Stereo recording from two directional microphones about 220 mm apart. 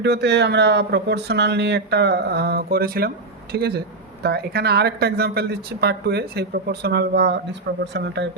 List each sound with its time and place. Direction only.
0.0 s speech: 50° right (ahead or behind)